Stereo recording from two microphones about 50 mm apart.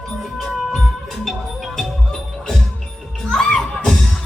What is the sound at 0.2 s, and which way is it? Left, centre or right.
Music, centre.